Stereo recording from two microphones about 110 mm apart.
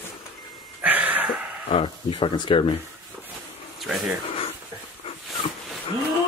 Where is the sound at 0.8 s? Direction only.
15° right (ahead or behind).